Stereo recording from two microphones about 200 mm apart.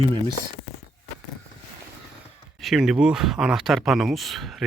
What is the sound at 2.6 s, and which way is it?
Speech, centre (ahead or behind).